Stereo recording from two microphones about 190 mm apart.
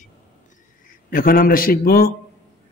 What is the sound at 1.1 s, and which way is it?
A man's voice, 50° left (ahead or behind).